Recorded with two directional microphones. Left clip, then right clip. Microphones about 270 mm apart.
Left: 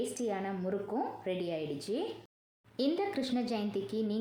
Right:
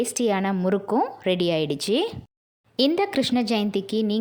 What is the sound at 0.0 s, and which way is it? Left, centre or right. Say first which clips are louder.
Speech: right 12 dB; right.